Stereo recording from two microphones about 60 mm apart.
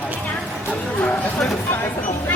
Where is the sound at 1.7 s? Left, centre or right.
Left.